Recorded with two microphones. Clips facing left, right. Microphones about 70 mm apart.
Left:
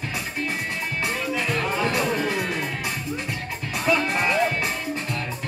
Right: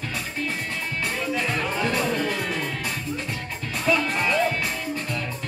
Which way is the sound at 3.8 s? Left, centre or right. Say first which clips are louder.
Left 1 dB; centre.